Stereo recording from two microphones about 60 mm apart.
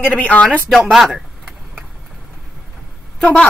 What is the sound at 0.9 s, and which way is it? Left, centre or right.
Speech, centre.